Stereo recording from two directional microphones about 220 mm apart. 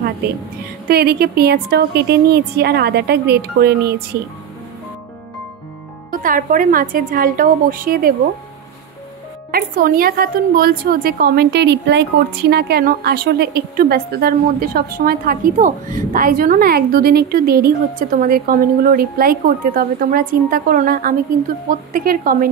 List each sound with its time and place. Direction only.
0.8 s a woman's voice: 45° right (ahead or behind)
6.2 s a woman's voice: 40° right (ahead or behind)
9.5 s a woman's voice: 40° right (ahead or behind)